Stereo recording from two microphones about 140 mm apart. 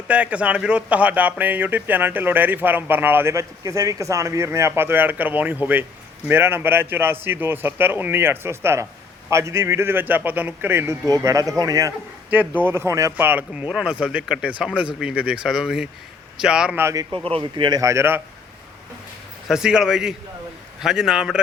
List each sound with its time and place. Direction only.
0.1 s a man's voice: 10° right (ahead or behind); by 11.9 s 25° right (ahead or behind)
12.3 s speech: 15° right (ahead or behind)
16.8 s a man's voice: 25° right (ahead or behind)
17.2 s a man's voice: 40° right (ahead or behind); by 18.2 s 15° right (ahead or behind)
19.5 s speech: 5° right (ahead or behind)